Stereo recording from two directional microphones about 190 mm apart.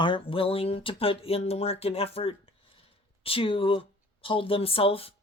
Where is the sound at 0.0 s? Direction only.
25° left (ahead or behind).